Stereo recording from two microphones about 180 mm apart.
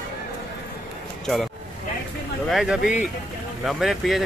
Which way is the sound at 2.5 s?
Centre (ahead or behind).